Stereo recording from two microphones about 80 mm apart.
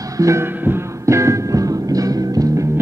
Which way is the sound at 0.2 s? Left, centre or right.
Right.